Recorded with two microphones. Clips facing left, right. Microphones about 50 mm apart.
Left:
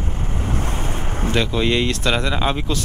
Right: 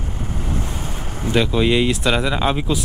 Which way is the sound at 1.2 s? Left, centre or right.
Centre.